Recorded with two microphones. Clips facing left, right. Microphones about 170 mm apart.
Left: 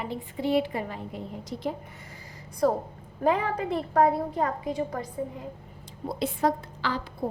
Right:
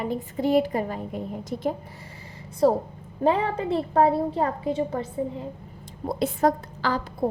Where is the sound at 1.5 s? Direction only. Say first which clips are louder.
Right 4 dB; 55° right (ahead or behind).